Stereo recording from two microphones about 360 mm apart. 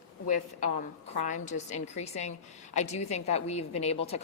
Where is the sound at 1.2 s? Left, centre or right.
Centre.